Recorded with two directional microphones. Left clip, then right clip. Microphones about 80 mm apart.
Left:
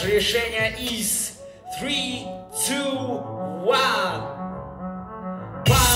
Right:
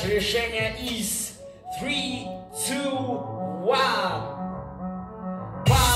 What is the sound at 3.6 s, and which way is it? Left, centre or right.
Music, left.